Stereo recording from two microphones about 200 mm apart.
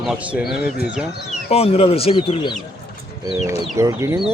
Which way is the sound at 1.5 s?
30° left (ahead or behind).